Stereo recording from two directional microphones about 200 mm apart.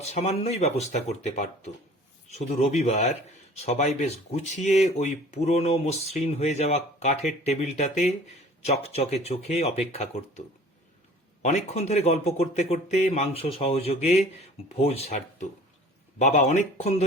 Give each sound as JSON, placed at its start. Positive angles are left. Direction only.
{"t": 0.0, "sound": "speech", "side_deg": 30}
{"t": 11.4, "sound": "speech", "side_deg": 35}